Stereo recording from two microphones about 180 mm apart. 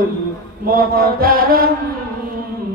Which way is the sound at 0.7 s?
55° right (ahead or behind).